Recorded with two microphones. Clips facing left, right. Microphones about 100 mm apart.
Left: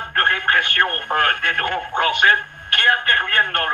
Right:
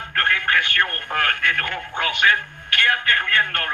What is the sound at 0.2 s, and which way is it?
Speech, 40° left (ahead or behind).